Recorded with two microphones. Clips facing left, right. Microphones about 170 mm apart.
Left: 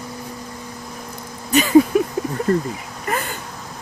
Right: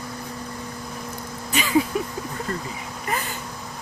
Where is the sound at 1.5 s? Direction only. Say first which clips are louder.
Left 9 dB; 45° left (ahead or behind).